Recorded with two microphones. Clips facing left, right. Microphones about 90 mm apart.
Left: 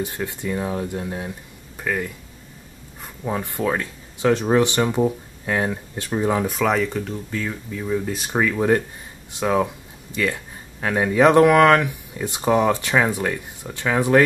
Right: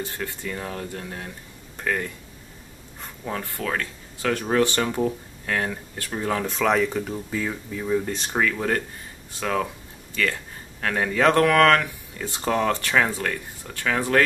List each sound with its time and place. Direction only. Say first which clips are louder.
0.0 s speech: left 4 dB; 15° left (ahead or behind)
1.8 s speech: left 1 dB; 5° left (ahead or behind)
6.5 s speech: left 1 dB; centre (ahead or behind)